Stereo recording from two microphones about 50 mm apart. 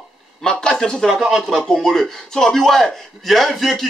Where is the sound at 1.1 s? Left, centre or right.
Centre.